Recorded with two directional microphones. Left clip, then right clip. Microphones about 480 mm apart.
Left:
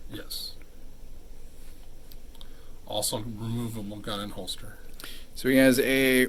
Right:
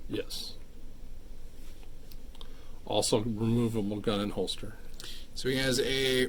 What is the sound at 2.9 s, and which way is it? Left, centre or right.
Speech, centre.